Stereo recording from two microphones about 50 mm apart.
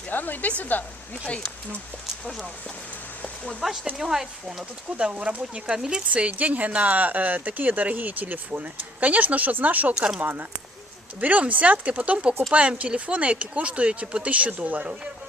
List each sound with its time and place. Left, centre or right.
0.1 s speech: left
3.2 s a sound: left
3.9 s speech: centre
5.1 s speech: right